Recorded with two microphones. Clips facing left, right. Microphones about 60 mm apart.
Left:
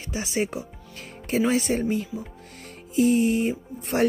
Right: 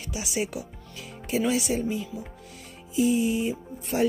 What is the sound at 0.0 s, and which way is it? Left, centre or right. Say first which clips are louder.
Speech: left 3 dB; left.